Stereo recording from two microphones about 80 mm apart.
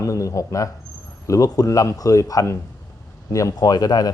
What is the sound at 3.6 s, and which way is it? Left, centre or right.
Speech, left.